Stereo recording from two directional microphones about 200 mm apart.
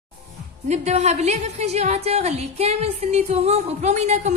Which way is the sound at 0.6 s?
35° right (ahead or behind).